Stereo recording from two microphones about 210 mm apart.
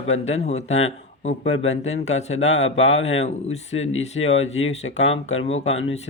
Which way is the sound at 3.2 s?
30° left (ahead or behind).